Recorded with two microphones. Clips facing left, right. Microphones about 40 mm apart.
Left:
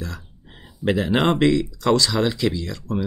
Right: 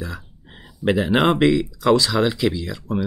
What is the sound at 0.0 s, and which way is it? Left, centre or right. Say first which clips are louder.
Speech: right 2 dB; centre.